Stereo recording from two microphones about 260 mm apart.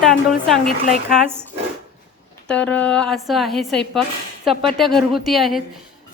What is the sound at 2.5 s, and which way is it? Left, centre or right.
A woman's voice, centre.